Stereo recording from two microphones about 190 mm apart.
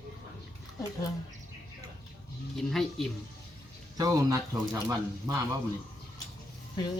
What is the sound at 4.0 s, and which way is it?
Speech, 20° right (ahead or behind).